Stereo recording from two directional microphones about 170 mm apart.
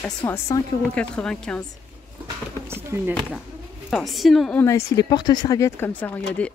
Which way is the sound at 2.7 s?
15° right (ahead or behind).